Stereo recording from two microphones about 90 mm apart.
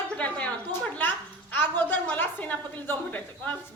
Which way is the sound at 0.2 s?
15° left (ahead or behind).